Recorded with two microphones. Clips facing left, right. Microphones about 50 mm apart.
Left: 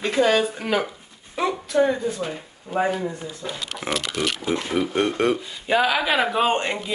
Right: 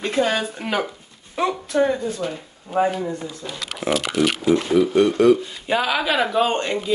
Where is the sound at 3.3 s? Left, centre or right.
Left.